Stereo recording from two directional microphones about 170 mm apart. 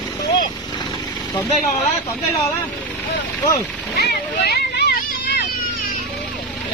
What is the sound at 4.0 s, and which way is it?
Vehicle, 70° left (ahead or behind).